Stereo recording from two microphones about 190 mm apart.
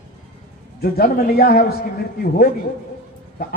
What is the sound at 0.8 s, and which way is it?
Speech, 50° left (ahead or behind).